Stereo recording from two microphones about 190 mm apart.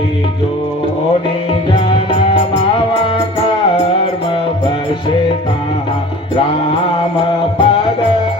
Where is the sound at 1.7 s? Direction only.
30° left (ahead or behind).